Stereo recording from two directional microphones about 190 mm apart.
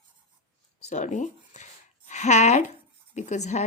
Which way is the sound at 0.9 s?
40° left (ahead or behind).